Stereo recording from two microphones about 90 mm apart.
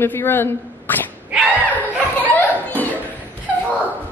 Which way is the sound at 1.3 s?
15° right (ahead or behind).